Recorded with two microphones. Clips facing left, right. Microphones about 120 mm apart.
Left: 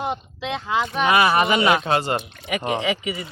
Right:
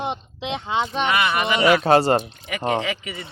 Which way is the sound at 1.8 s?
35° right (ahead or behind).